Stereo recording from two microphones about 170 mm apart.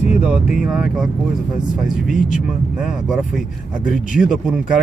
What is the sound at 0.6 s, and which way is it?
Speech, centre (ahead or behind).